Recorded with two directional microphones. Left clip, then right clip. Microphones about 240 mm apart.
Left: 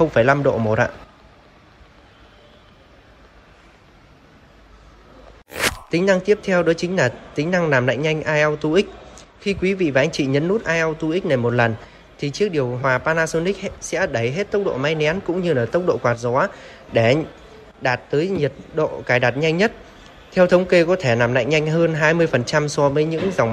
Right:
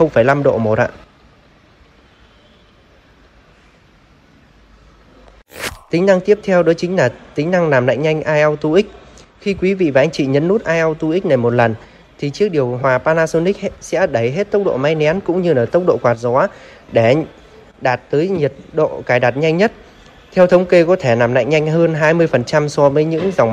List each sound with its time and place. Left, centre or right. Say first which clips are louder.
0.0 s speech: right 4 dB; centre
5.5 s speech: even; centre